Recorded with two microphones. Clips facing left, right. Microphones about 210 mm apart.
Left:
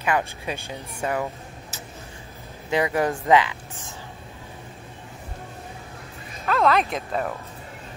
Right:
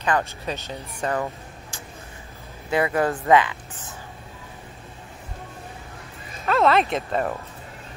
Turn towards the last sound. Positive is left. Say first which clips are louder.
# right 3 dB
turn(degrees=0)  # may be behind; listen again after turning